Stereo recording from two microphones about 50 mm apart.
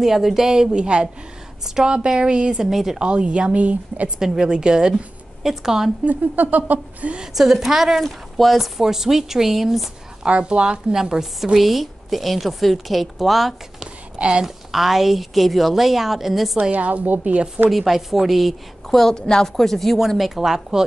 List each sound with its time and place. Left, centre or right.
0.0 s a woman's voice: centre
2.7 s a woman's voice: centre
3.0 s a woman's voice: right
4.2 s a woman's voice: centre
6.0 s speech: right
7.3 s a woman's voice: centre
10.2 s a woman's voice: right; by 13.8 s centre
14.1 s speech: centre
14.4 s a woman's voice: centre
16.7 s speech: right
17.2 s a woman's voice: right
17.6 s a woman's voice: centre
20.2 s a woman's voice: centre